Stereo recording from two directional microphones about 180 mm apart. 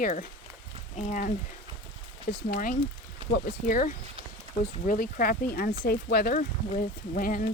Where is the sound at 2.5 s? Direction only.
50° left (ahead or behind).